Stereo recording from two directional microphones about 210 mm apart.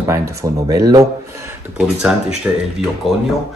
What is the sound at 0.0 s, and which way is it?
Speech, 15° right (ahead or behind).